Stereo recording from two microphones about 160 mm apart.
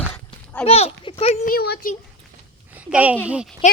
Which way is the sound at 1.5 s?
75° left (ahead or behind).